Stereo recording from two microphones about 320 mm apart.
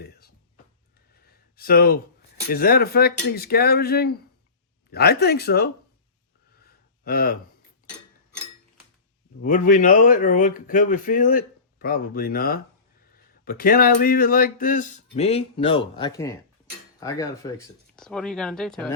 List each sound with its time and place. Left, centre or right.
1.5 s speech: left
7.0 s a sound: left
9.4 s speech: left
17.0 s cutlery: centre
17.9 s speech: centre